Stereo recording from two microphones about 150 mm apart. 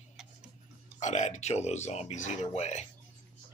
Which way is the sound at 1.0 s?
50° left (ahead or behind).